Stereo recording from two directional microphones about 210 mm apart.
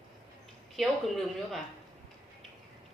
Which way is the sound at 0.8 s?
Centre (ahead or behind).